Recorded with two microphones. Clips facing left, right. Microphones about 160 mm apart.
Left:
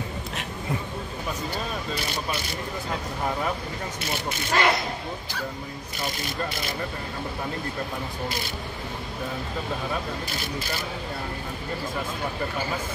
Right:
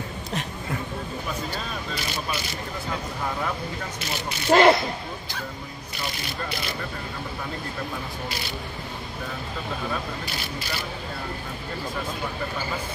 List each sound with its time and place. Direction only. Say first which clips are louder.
4.5 s speech: right 8 dB; 30° right (ahead or behind)